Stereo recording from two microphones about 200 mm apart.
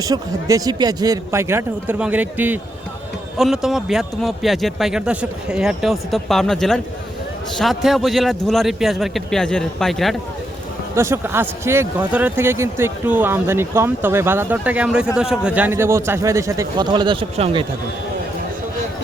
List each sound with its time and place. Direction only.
0.0 s a man's voice: 15° right (ahead or behind); by 10.2 s centre (ahead or behind)
10.9 s speech: 15° right (ahead or behind)